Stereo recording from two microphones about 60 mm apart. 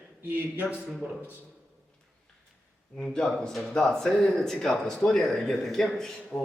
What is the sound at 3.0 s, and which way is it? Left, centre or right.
Speech, centre.